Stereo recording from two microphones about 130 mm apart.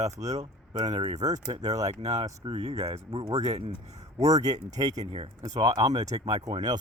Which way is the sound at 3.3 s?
55° right (ahead or behind).